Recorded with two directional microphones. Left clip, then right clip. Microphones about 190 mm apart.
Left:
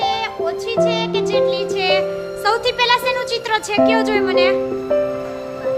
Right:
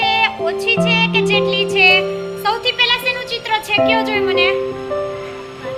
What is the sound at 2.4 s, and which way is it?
Music, 40° left (ahead or behind).